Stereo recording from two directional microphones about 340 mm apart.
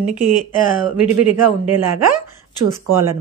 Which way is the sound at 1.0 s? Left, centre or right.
Right.